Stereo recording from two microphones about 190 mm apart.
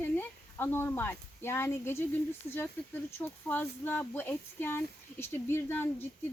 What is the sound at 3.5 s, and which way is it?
Speech, 10° left (ahead or behind).